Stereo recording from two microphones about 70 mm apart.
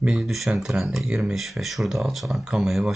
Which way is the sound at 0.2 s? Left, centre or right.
Centre.